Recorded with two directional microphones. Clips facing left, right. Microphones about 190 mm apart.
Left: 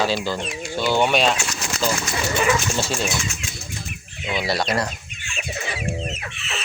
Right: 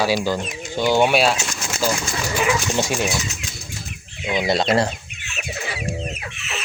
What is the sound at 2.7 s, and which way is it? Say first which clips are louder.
Speech: right 3 dB; 15° right (ahead or behind).